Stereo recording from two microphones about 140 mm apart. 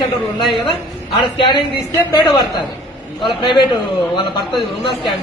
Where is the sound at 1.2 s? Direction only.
35° left (ahead or behind).